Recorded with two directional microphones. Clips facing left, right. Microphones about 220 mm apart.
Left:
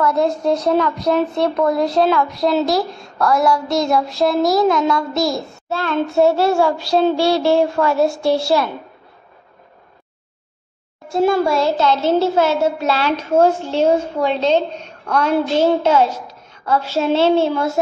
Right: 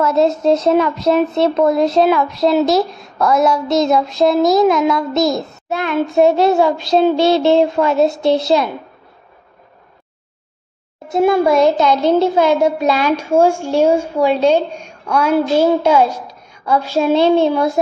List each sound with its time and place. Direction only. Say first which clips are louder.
0.0 s speech: right 3 dB; 25° right (ahead or behind)
11.1 s a child's voice: right 3 dB; 20° right (ahead or behind)